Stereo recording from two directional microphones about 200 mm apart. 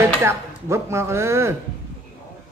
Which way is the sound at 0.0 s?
10° right (ahead or behind).